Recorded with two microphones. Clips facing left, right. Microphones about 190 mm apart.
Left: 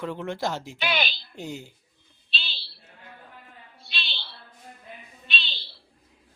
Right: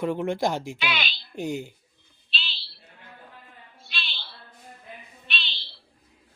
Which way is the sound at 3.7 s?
35° left (ahead or behind).